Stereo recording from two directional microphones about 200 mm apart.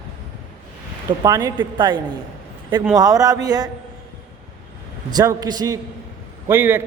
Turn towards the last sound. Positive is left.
turn(degrees=-10)  # may be behind; listen again after turning